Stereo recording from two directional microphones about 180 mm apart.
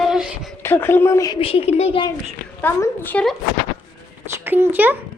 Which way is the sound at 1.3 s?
30° left (ahead or behind).